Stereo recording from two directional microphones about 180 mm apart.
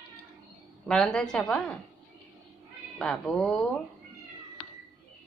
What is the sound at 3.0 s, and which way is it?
Speech, 5° left (ahead or behind).